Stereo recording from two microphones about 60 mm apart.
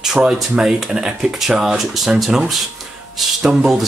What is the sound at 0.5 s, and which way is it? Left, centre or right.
Speech, centre.